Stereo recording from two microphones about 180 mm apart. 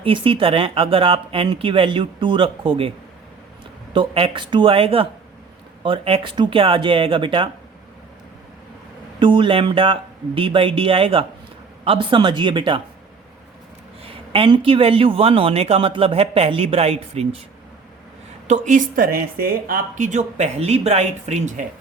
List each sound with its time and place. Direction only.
0.0 s speech: 30° right (ahead or behind)
3.9 s speech: 30° right (ahead or behind)
9.1 s speech: 25° right (ahead or behind)
14.0 s speech: 30° right (ahead or behind)
18.4 s speech: 40° right (ahead or behind)